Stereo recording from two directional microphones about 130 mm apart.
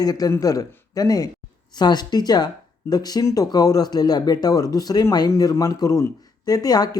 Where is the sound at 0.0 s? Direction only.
30° left (ahead or behind).